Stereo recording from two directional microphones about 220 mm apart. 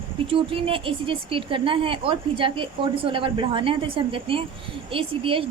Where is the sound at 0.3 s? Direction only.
25° right (ahead or behind).